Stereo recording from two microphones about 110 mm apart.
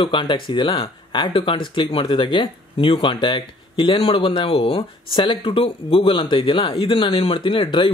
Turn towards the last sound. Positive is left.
turn(degrees=50)  # may be behind; listen again after turning